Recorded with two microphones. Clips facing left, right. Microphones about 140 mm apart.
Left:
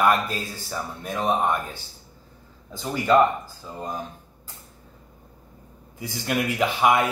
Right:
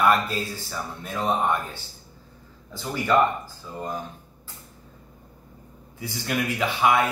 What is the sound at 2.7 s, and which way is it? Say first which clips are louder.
Speech: left 3 dB; 15° left (ahead or behind).